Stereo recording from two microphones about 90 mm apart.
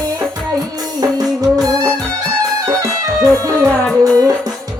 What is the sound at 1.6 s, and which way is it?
Music, 45° right (ahead or behind).